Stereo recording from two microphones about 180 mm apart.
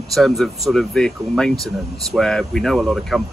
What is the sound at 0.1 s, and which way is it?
Speech, centre (ahead or behind).